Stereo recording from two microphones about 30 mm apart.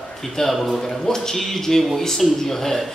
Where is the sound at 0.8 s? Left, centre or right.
Centre.